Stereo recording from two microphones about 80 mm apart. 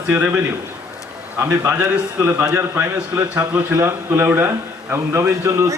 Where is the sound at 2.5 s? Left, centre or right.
Right.